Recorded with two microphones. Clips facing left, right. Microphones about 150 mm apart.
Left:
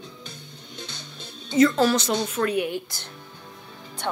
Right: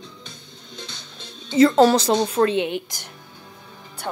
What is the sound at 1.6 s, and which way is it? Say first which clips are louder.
A woman's voice: right 4 dB; 35° right (ahead or behind).